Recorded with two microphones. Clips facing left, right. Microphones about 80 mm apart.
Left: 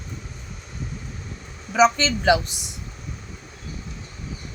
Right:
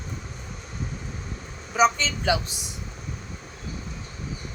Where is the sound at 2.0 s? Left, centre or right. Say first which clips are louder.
Left 6 dB; left.